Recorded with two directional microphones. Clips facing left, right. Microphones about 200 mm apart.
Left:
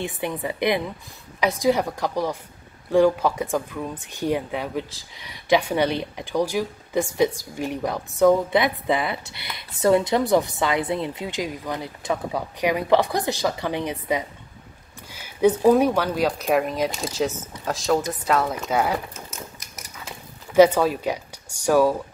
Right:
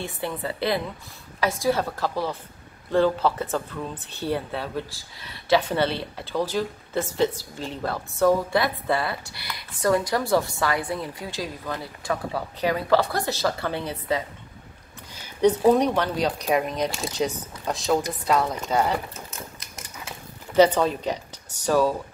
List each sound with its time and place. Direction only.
0.2 s speech: 15° left (ahead or behind)
15.0 s a sound: 10° left (ahead or behind)
15.7 s speech: 5° left (ahead or behind)
20.5 s speech: 10° left (ahead or behind)